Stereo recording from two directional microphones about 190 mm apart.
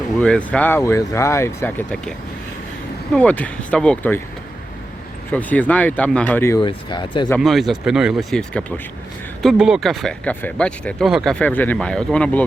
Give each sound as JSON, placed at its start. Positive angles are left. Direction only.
{"t": 0.2, "sound": "speech", "side_deg": 5}
{"t": 3.2, "sound": "speech", "side_deg": 5}
{"t": 5.3, "sound": "speech", "side_deg": 10}
{"t": 6.6, "sound": "speech", "side_deg": 25}
{"t": 7.3, "sound": "speech", "side_deg": 0}